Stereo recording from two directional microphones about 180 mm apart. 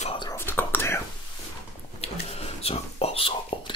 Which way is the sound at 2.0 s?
35° left (ahead or behind).